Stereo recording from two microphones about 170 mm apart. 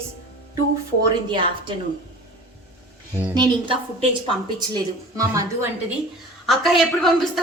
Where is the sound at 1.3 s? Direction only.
30° right (ahead or behind).